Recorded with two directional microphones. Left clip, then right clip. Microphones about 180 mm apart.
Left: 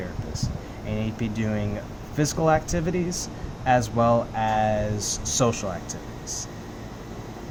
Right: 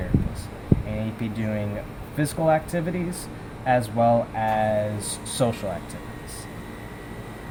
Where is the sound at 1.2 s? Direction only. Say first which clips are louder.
Even; 10° left (ahead or behind).